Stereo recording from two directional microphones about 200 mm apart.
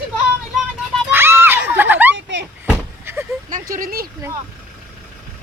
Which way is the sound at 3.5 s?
45° right (ahead or behind).